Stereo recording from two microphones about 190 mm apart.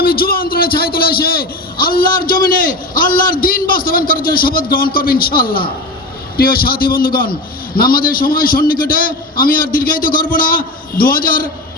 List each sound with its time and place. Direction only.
0.0 s a man's voice: 50° left (ahead or behind)